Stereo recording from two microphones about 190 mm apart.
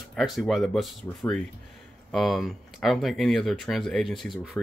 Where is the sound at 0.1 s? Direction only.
Centre (ahead or behind).